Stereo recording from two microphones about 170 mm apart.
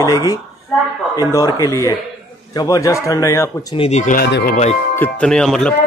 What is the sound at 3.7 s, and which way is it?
Speech, 40° left (ahead or behind).